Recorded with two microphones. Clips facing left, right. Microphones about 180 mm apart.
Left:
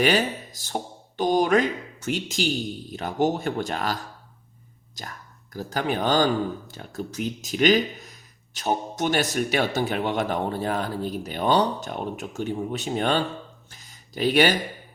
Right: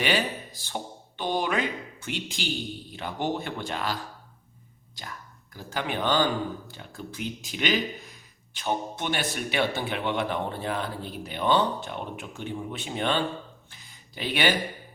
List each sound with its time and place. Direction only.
0.0 s speech: 45° left (ahead or behind)
5.0 s speech: 40° left (ahead or behind)
13.7 s a sound: 40° left (ahead or behind)